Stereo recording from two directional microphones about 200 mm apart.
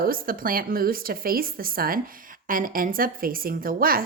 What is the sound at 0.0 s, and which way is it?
A woman's voice, 45° right (ahead or behind).